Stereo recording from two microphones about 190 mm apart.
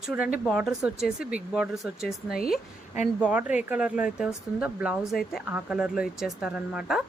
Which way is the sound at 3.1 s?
5° right (ahead or behind).